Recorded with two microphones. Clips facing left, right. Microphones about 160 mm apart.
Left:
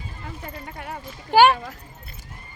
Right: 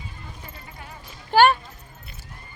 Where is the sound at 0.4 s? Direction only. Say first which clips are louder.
Left 7 dB; 65° left (ahead or behind).